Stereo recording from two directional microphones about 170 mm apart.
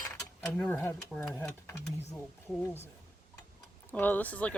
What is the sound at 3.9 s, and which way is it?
Speech, 10° left (ahead or behind).